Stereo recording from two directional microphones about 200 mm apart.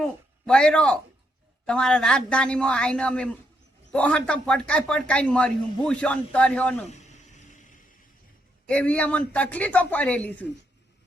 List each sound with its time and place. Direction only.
0.0 s a man's voice: 5° left (ahead or behind)
6.8 s a sound: 35° left (ahead or behind)
8.6 s speech: 5° left (ahead or behind)